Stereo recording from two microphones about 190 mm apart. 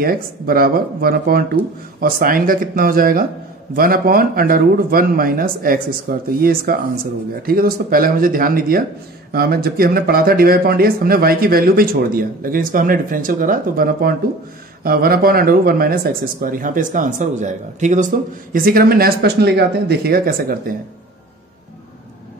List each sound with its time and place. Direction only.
0.0 s speech: 50° right (ahead or behind)